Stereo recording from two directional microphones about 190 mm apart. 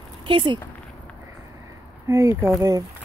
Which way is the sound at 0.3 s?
25° right (ahead or behind).